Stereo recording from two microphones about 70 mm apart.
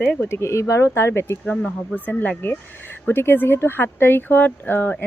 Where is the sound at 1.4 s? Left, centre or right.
Left.